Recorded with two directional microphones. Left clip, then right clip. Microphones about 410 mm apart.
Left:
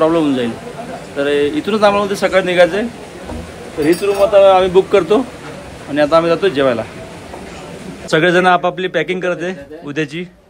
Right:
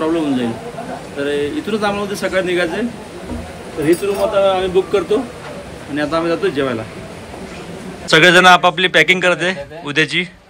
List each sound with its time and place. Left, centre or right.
0.0 s speech: centre
4.4 s speech: centre
8.1 s a man's voice: centre